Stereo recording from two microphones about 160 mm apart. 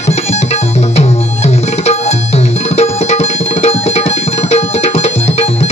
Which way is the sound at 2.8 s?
40° left (ahead or behind).